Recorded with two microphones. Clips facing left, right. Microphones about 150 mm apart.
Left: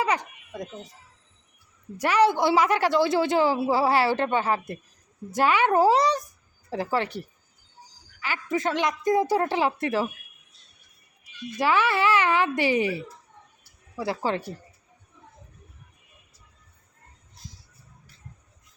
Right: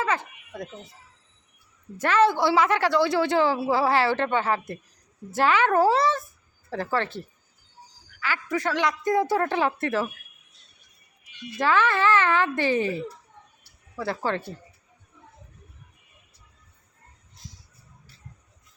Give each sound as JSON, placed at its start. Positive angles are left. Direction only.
{"t": 0.0, "sound": "a sound", "side_deg": 15}
{"t": 2.0, "sound": "a woman's voice", "side_deg": 15}
{"t": 11.5, "sound": "a woman's voice", "side_deg": 15}